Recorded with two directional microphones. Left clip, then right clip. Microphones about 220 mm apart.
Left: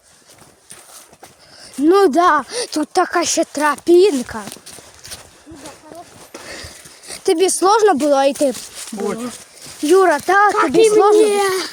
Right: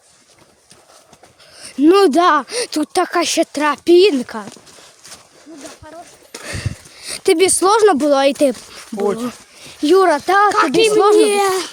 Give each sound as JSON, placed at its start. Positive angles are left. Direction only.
{"t": 1.5, "sound": "speech", "side_deg": -25}
{"t": 6.3, "sound": "a sound", "side_deg": -15}
{"t": 7.1, "sound": "speech", "side_deg": -15}
{"t": 11.3, "sound": "speech", "side_deg": 0}